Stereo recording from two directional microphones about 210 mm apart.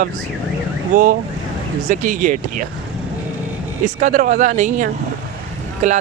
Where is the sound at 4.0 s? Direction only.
35° right (ahead or behind).